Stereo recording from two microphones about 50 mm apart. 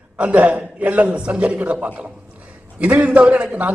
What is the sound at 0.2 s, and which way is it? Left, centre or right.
A man's voice, right.